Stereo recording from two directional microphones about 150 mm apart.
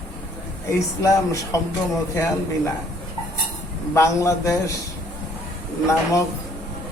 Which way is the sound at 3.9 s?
20° left (ahead or behind).